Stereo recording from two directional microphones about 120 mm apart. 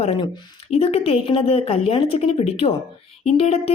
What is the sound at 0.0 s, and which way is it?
A woman's voice, 45° left (ahead or behind).